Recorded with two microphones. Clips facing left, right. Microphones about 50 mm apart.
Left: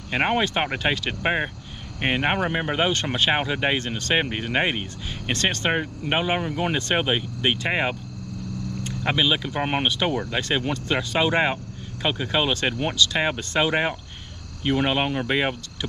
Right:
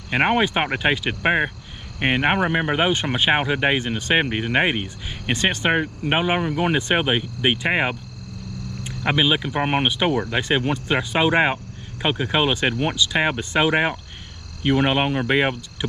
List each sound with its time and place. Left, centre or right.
0.1 s speech: centre